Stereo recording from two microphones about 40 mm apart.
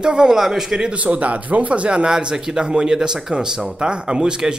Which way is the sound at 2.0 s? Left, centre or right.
Centre.